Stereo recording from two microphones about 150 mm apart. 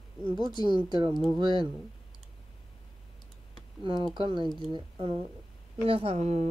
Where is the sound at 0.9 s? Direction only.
30° right (ahead or behind).